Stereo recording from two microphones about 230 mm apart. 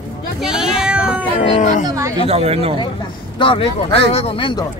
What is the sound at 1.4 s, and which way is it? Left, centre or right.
Speech, left.